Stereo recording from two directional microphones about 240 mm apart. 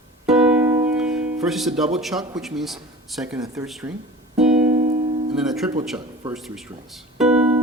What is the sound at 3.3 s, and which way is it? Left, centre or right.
Speech, centre.